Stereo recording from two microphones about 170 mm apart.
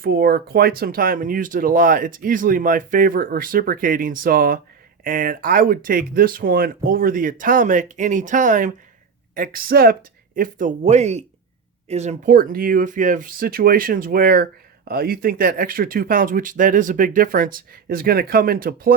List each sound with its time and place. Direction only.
0.0 s speech: 60° right (ahead or behind)